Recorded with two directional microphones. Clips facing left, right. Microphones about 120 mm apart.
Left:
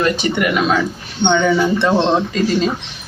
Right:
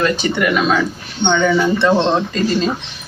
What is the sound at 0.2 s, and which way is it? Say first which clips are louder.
Speech: even; 10° left (ahead or behind).